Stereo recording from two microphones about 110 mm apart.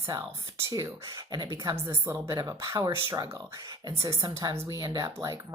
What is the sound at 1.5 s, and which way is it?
Speech, 25° right (ahead or behind).